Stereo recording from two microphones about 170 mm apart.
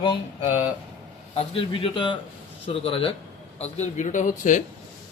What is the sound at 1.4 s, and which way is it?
A man's voice, 30° left (ahead or behind).